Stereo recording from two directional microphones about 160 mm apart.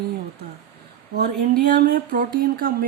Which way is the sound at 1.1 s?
80° right.